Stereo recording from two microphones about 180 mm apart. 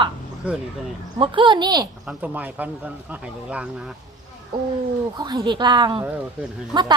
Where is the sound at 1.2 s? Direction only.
25° right (ahead or behind).